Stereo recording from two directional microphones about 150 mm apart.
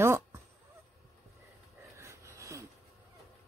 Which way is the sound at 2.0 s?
20° right (ahead or behind).